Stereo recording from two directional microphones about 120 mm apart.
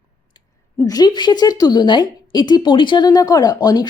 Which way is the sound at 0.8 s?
30° left (ahead or behind).